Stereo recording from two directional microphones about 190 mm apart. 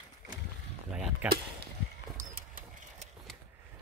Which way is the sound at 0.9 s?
5° right (ahead or behind).